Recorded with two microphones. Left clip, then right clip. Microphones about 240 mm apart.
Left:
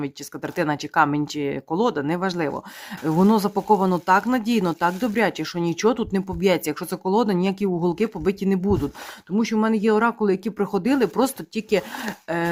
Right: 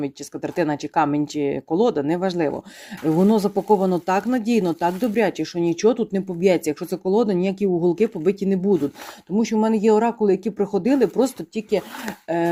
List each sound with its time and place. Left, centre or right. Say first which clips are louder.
0.0 s speech: right 2 dB; centre